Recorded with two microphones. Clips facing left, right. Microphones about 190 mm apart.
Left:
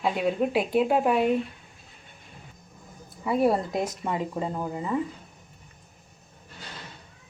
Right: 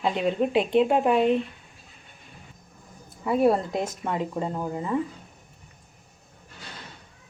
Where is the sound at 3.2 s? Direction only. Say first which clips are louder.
Right 2 dB; centre (ahead or behind).